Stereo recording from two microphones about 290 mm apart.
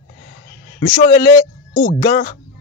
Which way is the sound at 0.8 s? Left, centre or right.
Left.